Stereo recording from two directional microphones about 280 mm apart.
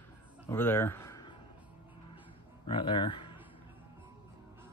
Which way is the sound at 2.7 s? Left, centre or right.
Centre.